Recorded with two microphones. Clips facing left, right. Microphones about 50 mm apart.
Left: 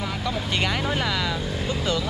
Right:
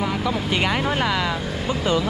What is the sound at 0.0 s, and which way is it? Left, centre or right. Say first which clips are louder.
Speech: right 5 dB; centre.